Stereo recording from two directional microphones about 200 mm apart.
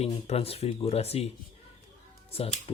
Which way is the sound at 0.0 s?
30° left (ahead or behind).